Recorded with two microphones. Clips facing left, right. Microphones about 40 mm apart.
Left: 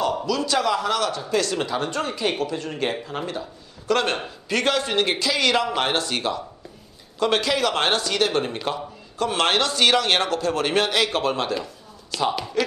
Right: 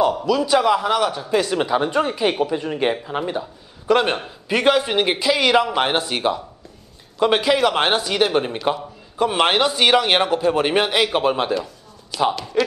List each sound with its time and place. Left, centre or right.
0.3 s speech: centre
11.5 s a sound: centre
12.4 s speech: centre